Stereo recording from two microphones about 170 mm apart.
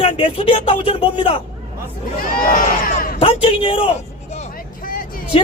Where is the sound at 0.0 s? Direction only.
30° left (ahead or behind).